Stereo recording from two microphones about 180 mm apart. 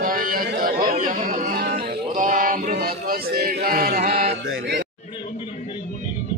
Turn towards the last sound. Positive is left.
turn(degrees=-65)  # may be behind; listen again after turning